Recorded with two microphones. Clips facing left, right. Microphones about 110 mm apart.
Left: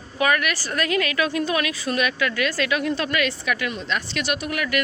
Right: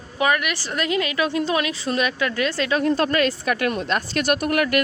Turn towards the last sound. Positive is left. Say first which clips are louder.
# right 6 dB
turn(degrees=-50)  # may be behind; listen again after turning